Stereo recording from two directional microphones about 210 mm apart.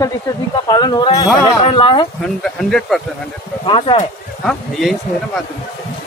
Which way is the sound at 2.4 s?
Centre (ahead or behind).